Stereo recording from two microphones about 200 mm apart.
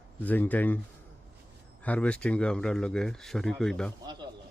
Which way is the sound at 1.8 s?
5° left (ahead or behind).